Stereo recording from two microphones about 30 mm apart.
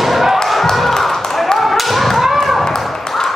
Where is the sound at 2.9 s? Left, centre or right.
Centre.